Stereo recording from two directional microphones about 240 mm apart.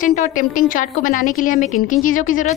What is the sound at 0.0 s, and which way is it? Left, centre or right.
A woman's voice, left.